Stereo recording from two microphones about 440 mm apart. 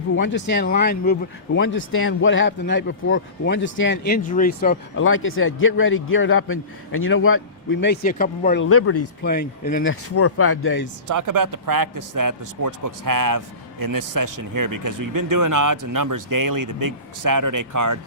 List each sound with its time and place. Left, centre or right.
0.2 s a man's voice: left
9.3 s a man's voice: centre
11.1 s a man's voice: right